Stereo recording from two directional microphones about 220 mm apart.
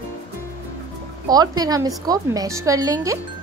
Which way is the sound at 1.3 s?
15° right (ahead or behind).